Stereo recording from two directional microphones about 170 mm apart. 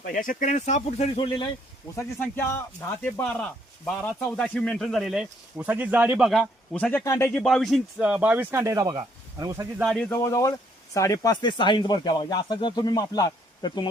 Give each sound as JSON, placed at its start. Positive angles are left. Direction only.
{"t": 0.0, "sound": "speech", "side_deg": 55}
{"t": 2.0, "sound": "a man's voice", "side_deg": 15}
{"t": 7.4, "sound": "speech", "side_deg": 0}
{"t": 9.8, "sound": "a man's voice", "side_deg": 5}
{"t": 10.1, "sound": "a man's voice", "side_deg": 15}